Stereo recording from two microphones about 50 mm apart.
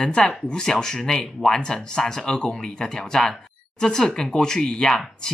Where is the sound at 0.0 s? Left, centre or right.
Centre.